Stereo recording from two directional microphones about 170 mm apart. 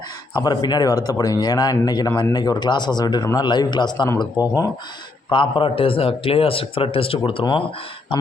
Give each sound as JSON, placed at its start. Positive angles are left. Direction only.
{"t": 0.3, "sound": "speech", "side_deg": 25}